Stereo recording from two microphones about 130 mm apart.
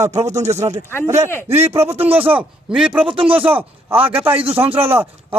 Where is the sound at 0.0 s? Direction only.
25° right (ahead or behind).